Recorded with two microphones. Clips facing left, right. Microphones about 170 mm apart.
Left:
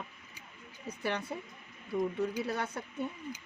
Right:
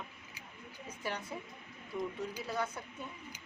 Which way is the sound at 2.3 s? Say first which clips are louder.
Left 3 dB; 65° left (ahead or behind).